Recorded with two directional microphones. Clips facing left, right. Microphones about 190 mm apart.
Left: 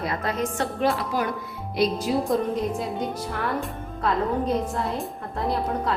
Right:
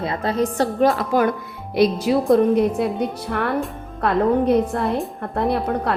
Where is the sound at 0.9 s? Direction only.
55° right (ahead or behind).